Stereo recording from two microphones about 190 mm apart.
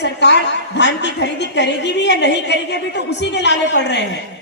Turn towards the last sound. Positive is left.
turn(degrees=65)  # may be behind; listen again after turning